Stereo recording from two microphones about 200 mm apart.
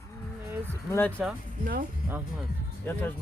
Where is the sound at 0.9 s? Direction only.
10° left (ahead or behind).